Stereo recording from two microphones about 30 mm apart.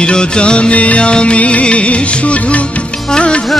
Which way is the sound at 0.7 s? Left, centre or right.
Left.